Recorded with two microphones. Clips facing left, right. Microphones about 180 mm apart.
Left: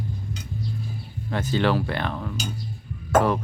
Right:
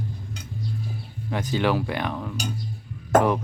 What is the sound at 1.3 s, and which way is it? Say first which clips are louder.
Speech: left 1 dB; 10° right (ahead or behind).